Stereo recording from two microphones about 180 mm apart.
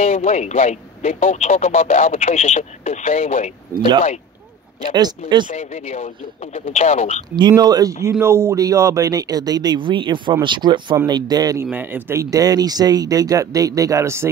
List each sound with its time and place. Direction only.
0.0 s speech: 35° left (ahead or behind)
5.5 s speech: 35° left (ahead or behind)
7.3 s speech: 25° right (ahead or behind)